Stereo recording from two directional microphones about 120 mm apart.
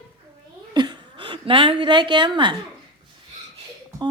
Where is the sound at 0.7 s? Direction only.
40° right (ahead or behind).